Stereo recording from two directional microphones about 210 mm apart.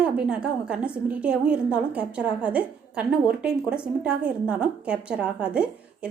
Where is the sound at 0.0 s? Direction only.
5° right (ahead or behind).